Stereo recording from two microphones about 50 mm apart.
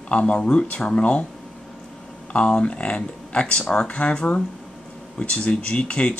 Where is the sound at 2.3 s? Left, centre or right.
Left.